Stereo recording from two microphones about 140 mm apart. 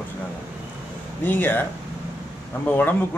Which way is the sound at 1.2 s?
15° left (ahead or behind).